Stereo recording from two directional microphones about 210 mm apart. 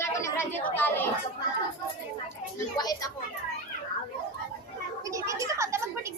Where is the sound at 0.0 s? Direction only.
10° left (ahead or behind).